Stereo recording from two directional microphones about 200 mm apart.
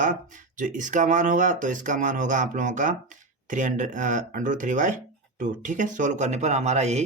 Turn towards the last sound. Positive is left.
turn(degrees=-35)  # may be behind; listen again after turning